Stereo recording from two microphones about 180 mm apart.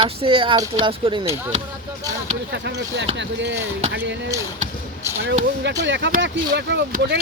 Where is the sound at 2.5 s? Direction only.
75° right (ahead or behind).